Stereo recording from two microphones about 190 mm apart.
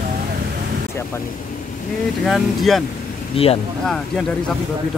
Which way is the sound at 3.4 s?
30° left (ahead or behind).